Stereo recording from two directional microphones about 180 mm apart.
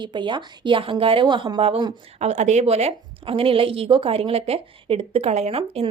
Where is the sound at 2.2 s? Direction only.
40° right (ahead or behind).